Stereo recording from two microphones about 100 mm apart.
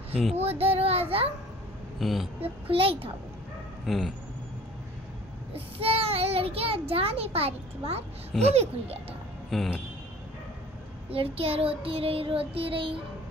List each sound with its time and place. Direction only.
0.3 s a child's voice: 90° right
2.0 s speech: centre (ahead or behind)
2.4 s child singing: 70° right (ahead or behind)
3.8 s speech: centre (ahead or behind)
5.5 s a child's voice: 75° right (ahead or behind)
9.5 s speech: centre (ahead or behind)
11.1 s child singing: 75° right (ahead or behind)